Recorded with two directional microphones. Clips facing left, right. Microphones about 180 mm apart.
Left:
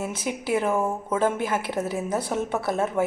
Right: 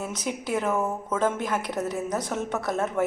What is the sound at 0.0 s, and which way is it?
Speech, 5° left (ahead or behind).